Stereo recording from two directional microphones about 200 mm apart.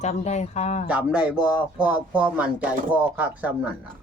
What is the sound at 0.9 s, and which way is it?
Speech, 5° right (ahead or behind).